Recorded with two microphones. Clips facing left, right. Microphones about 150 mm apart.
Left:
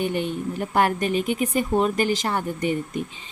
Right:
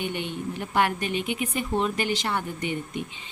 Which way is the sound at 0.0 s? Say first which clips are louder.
Left 5 dB; 40° left (ahead or behind).